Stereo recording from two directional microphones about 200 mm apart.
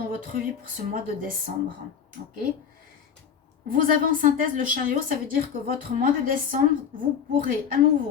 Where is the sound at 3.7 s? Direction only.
45° right (ahead or behind).